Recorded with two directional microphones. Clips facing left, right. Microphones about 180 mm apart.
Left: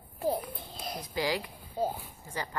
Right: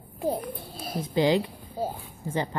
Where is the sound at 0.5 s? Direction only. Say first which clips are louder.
Right 5 dB; 10° right (ahead or behind).